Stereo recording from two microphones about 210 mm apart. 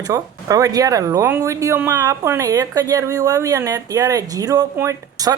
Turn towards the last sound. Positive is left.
turn(degrees=-15)  # may be behind; listen again after turning